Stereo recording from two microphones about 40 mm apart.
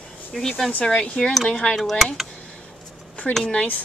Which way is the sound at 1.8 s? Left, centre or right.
Centre.